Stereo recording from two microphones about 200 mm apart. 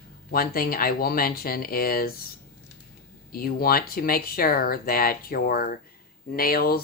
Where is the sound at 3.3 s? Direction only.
50° left (ahead or behind).